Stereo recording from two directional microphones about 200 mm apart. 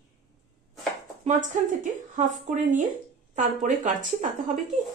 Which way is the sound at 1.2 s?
40° right (ahead or behind).